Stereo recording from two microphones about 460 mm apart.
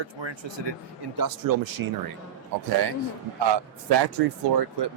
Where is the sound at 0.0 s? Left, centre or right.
Right.